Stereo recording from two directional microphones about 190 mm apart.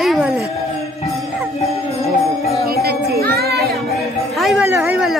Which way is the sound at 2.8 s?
55° right (ahead or behind).